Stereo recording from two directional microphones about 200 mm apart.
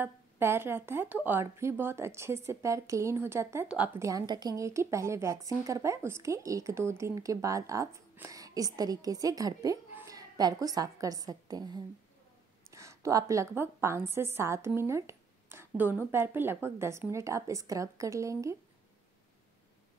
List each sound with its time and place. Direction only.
0.0 s a woman's voice: 10° right (ahead or behind)
12.7 s a sound: 15° right (ahead or behind)
13.6 s a woman's voice: 10° right (ahead or behind)